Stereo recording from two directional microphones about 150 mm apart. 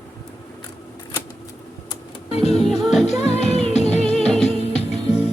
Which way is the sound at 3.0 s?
45° left (ahead or behind).